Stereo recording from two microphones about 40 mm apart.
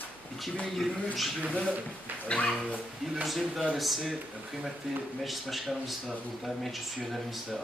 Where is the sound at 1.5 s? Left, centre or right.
Left.